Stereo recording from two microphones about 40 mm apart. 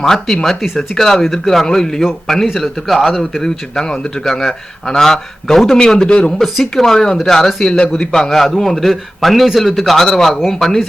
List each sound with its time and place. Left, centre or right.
0.0 s a man's voice: centre
3.2 s a man's voice: centre
6.4 s a man's voice: centre
6.8 s a man's voice: centre